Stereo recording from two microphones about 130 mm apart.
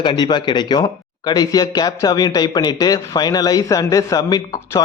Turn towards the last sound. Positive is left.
turn(degrees=30)  # may be behind; listen again after turning